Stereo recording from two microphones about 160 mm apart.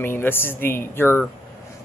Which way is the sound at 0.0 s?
15° left (ahead or behind).